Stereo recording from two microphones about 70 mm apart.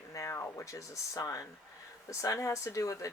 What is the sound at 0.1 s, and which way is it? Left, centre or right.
Speech, left.